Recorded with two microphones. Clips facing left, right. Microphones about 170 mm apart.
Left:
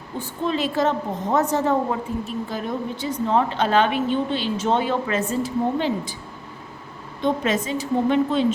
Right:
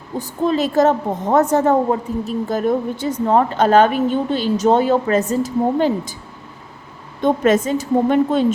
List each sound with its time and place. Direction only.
0.2 s a woman's voice: 40° right (ahead or behind)
7.2 s a woman's voice: 50° right (ahead or behind)